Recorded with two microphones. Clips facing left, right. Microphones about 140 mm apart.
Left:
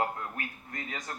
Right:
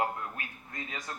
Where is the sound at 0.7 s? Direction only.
25° right (ahead or behind).